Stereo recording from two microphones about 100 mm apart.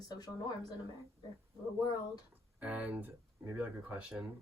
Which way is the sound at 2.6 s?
15° right (ahead or behind).